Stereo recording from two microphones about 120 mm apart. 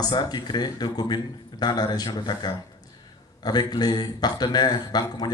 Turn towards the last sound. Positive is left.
turn(degrees=35)  # may be behind; listen again after turning